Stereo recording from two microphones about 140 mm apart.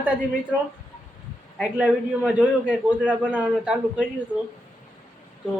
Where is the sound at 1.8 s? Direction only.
10° right (ahead or behind).